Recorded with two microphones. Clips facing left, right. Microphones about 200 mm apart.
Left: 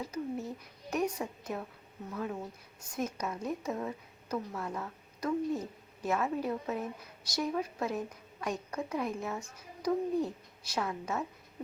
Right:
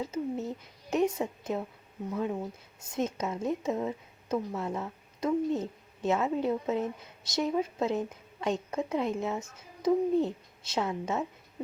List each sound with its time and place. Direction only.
0.0 s a woman's voice: 25° right (ahead or behind)